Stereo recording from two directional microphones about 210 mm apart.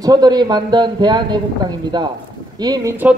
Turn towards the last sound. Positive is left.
turn(degrees=-10)  # may be behind; listen again after turning